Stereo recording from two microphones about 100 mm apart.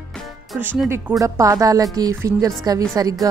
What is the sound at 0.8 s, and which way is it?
A woman's voice, 25° right (ahead or behind).